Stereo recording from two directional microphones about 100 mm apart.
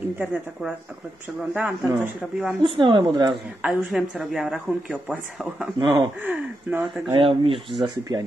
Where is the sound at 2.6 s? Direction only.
55° right (ahead or behind).